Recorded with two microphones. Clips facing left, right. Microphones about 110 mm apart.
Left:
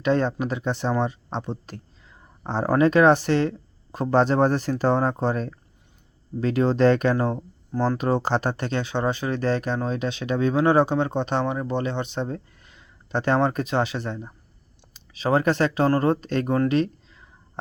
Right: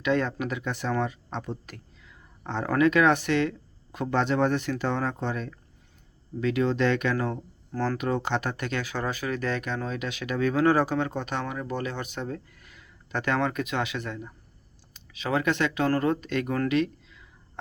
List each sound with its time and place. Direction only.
0.0 s speech: 30° left (ahead or behind)
7.9 s speech: 35° left (ahead or behind)